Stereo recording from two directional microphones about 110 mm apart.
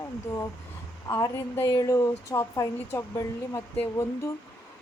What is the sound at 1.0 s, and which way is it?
A woman's voice, 30° left (ahead or behind).